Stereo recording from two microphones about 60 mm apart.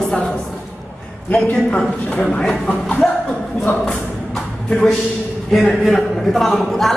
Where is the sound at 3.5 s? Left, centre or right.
Centre.